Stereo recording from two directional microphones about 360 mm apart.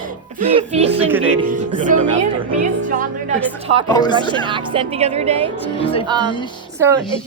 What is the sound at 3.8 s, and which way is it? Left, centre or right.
Speech, centre.